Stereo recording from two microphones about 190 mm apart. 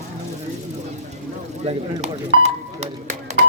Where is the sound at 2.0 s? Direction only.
35° right (ahead or behind).